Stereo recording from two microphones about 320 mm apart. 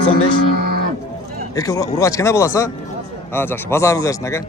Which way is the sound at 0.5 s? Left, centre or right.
Right.